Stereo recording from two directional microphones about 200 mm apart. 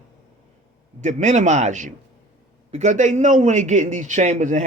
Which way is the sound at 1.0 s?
35° right (ahead or behind).